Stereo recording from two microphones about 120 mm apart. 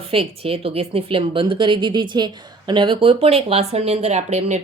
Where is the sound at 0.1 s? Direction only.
50° right (ahead or behind).